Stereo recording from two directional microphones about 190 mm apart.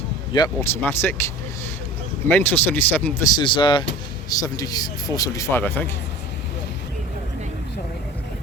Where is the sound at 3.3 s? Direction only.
25° left (ahead or behind).